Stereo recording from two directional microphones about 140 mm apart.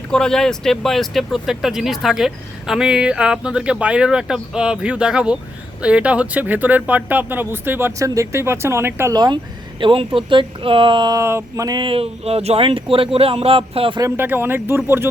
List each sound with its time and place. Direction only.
0.1 s speech: 5° left (ahead or behind); by 9.1 s 15° right (ahead or behind)
9.1 s speech: 30° right (ahead or behind)
11.2 s speech: 20° right (ahead or behind); by 14.0 s 40° right (ahead or behind)
14.0 s speech: 15° right (ahead or behind)